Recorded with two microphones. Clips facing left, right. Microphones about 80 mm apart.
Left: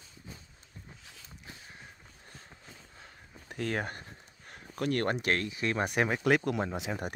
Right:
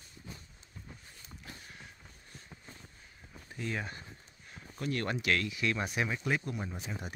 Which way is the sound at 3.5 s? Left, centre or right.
Left.